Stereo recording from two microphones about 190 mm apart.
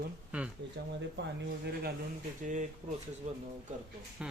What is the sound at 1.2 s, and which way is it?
Speech, 65° right (ahead or behind).